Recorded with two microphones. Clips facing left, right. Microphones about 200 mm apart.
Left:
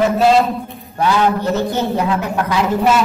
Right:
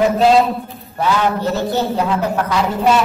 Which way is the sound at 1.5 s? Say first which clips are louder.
Left 1 dB; 15° left (ahead or behind).